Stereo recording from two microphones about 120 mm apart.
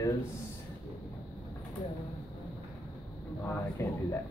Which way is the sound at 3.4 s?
20° left (ahead or behind).